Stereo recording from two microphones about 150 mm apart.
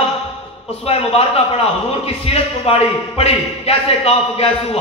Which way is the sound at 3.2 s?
40° left (ahead or behind).